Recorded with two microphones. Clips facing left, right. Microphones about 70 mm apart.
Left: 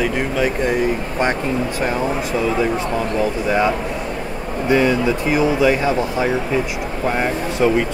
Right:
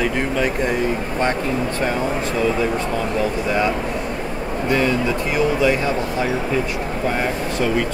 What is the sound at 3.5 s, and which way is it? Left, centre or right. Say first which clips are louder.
Speech: left 2 dB; centre.